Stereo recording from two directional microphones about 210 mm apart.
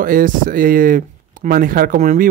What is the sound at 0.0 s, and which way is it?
Speech, 40° right (ahead or behind).